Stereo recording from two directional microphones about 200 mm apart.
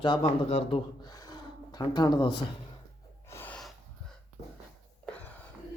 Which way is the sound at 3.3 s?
10° left (ahead or behind).